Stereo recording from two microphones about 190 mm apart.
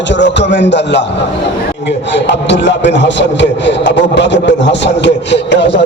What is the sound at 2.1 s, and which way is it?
A man's voice, 65° left (ahead or behind).